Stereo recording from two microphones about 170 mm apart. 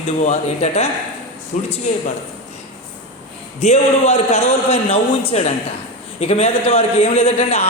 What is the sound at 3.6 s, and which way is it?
A man's voice, 40° left (ahead or behind).